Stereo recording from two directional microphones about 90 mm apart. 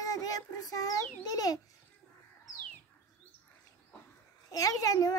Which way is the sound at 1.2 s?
40° left (ahead or behind).